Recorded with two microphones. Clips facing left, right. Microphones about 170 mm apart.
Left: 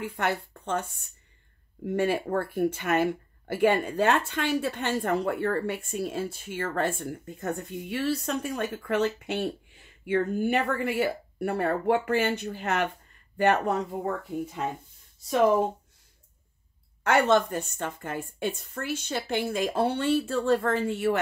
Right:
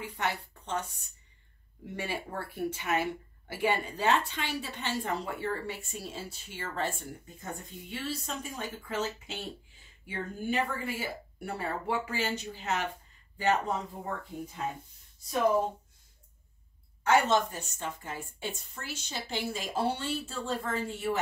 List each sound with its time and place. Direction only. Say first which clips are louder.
0.0 s speech: left 5 dB; 50° left (ahead or behind)
1.9 s speech: left 11 dB; 50° left (ahead or behind)
17.0 s speech: left 3 dB; 60° left (ahead or behind)